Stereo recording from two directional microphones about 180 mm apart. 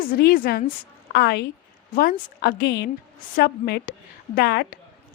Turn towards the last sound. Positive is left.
turn(degrees=65)  # may be behind; listen again after turning